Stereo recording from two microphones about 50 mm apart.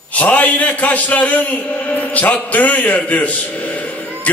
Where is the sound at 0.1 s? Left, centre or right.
Left.